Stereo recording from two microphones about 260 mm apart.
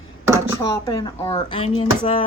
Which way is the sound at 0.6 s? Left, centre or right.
Centre.